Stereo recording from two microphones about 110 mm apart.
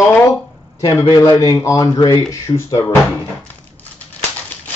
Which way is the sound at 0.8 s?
35° left (ahead or behind).